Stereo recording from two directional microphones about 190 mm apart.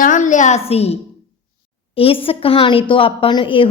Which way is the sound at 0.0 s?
40° left (ahead or behind).